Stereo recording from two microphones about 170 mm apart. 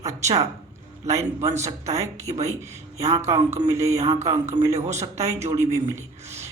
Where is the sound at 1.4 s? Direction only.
15° right (ahead or behind).